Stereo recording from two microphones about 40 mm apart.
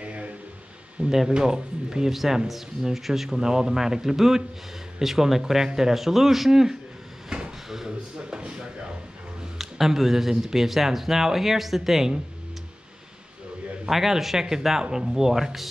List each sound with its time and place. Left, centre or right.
0.0 s a sound: right
1.0 s speech: centre
7.2 s drawer open or close: centre
8.4 s speech: right
9.6 s speech: centre
13.8 s speech: centre